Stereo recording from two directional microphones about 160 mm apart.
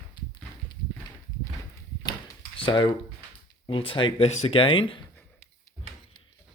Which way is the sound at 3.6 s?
35° left (ahead or behind).